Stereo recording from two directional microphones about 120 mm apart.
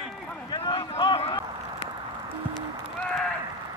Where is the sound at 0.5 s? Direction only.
40° left (ahead or behind).